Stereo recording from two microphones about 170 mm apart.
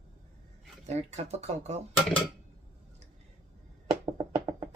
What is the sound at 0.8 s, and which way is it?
Speech, 40° right (ahead or behind).